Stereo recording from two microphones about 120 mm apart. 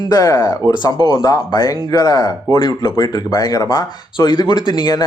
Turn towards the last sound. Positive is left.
turn(degrees=35)  # may be behind; listen again after turning